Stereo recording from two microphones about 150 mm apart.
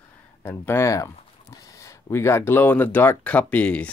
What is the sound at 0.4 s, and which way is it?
Speech, 15° left (ahead or behind).